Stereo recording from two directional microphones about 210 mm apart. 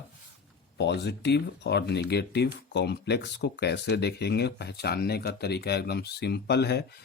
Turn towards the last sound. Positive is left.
turn(degrees=50)  # may be behind; listen again after turning